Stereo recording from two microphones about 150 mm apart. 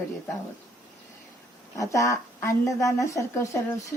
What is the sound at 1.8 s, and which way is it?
A woman's voice, 20° left (ahead or behind).